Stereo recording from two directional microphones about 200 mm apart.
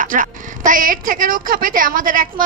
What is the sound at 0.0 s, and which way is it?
A woman's voice, 40° right (ahead or behind).